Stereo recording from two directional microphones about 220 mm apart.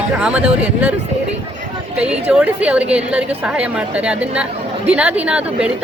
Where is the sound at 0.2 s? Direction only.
5° right (ahead or behind).